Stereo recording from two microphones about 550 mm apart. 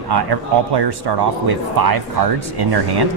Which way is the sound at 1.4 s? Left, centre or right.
Right.